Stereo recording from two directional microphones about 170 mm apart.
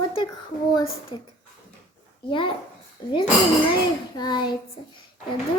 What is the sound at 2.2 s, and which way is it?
Speech, 30° left (ahead or behind).